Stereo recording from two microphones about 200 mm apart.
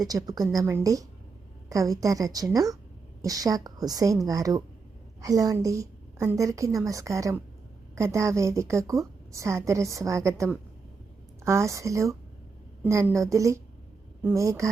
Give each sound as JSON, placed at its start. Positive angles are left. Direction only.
{"t": 0.0, "sound": "a woman's voice", "side_deg": -20}